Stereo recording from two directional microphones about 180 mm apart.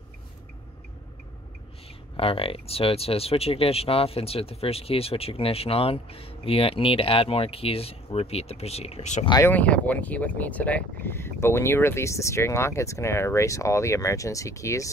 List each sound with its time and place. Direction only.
2.1 s speech: 30° left (ahead or behind)
9.3 s speech: 10° left (ahead or behind)